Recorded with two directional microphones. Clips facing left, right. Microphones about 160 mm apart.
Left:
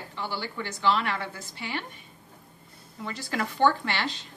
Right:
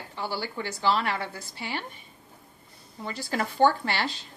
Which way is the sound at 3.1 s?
35° right (ahead or behind).